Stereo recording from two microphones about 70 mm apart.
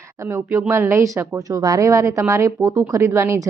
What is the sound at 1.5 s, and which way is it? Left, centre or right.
Speech, right.